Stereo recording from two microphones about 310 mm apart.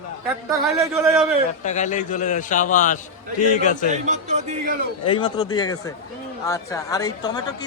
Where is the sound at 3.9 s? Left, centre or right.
Right.